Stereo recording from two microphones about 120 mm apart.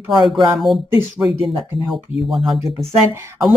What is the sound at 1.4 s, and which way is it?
Speech, centre (ahead or behind).